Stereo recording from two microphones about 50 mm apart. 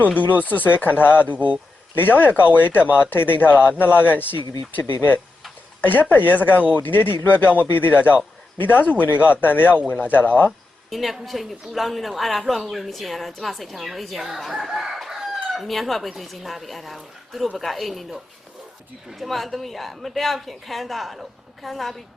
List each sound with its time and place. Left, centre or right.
0.0 s a man's voice: left
6.6 s speech: right
6.8 s a man's voice: left
10.8 s a woman's voice: centre
14.3 s chicken: centre
15.6 s a woman's voice: centre
19.2 s a woman's voice: centre